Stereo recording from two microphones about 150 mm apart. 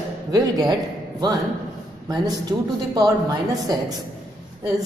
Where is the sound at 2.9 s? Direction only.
25° right (ahead or behind).